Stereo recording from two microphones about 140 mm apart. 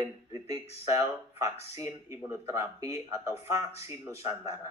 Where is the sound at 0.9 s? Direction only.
20° right (ahead or behind).